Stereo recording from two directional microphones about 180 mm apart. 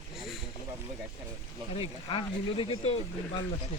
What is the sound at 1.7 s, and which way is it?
Speech, 30° left (ahead or behind).